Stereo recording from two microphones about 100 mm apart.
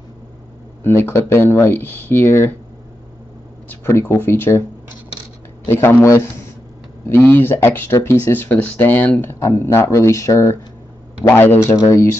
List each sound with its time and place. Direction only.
0.8 s speech: 25° left (ahead or behind)
4.1 s speech: 25° left (ahead or behind)
5.7 s speech: 25° left (ahead or behind)
9.3 s speech: 30° left (ahead or behind)
11.2 s speech: 20° left (ahead or behind)